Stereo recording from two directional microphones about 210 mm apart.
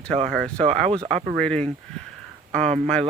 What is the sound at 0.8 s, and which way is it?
Speech, 30° right (ahead or behind).